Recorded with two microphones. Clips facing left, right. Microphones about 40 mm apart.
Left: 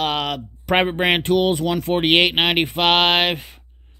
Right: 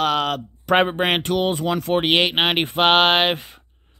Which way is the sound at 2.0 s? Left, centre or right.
Left.